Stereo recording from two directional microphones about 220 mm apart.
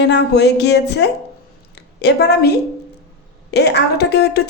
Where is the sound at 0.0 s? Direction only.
50° left (ahead or behind).